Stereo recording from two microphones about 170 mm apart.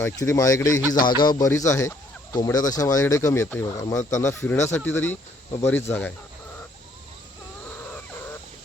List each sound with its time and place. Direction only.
0.0 s speech: 15° left (ahead or behind)